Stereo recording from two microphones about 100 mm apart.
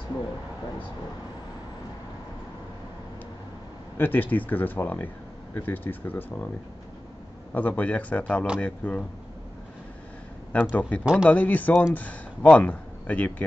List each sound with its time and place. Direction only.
4.0 s speech: 20° left (ahead or behind)
7.5 s speech: 15° left (ahead or behind)
10.5 s speech: 15° left (ahead or behind)